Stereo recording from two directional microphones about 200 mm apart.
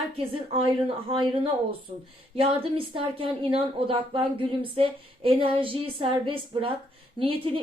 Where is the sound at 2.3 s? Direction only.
25° right (ahead or behind).